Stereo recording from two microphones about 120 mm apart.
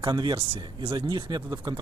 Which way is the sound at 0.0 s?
40° right (ahead or behind).